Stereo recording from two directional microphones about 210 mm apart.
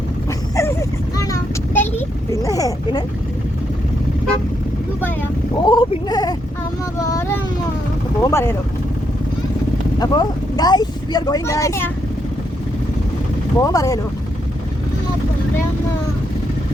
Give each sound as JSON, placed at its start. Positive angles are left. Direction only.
{"t": 0.3, "sound": "vehicle", "side_deg": 15}
{"t": 2.0, "sound": "a sound", "side_deg": 15}
{"t": 5.5, "sound": "a sound", "side_deg": 20}
{"t": 8.2, "sound": "speech", "side_deg": 15}
{"t": 10.0, "sound": "speech", "side_deg": 20}
{"t": 13.6, "sound": "speech", "side_deg": 15}